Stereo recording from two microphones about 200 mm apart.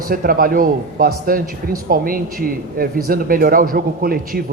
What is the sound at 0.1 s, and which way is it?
A man's voice, 45° right (ahead or behind).